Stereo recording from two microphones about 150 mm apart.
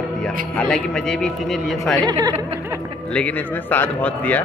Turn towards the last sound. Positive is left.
turn(degrees=10)  # may be behind; listen again after turning